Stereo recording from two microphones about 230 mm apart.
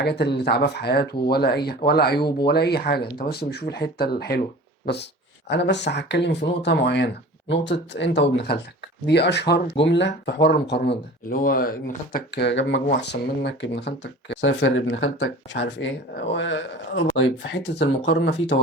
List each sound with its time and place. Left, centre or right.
0.0 s speech: left
5.5 s speech: left